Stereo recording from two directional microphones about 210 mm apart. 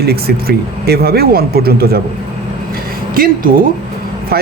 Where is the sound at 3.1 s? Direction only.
40° right (ahead or behind).